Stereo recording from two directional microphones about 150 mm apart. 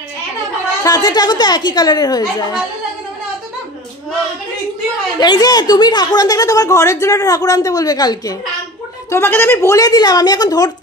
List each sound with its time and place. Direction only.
0.8 s speech: 25° left (ahead or behind)
5.2 s speech: 25° left (ahead or behind)
9.1 s speech: 15° left (ahead or behind)